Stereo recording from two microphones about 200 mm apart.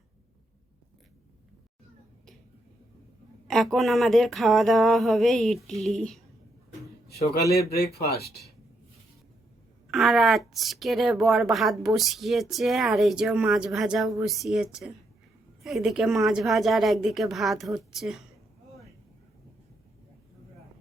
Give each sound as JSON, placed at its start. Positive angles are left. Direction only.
{"t": 3.4, "sound": "a woman's voice", "side_deg": 0}
{"t": 7.9, "sound": "speech", "side_deg": 50}
{"t": 9.9, "sound": "a woman's voice", "side_deg": 0}